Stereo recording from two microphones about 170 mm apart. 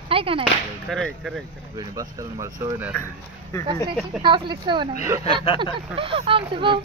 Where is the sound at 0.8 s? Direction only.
Centre (ahead or behind).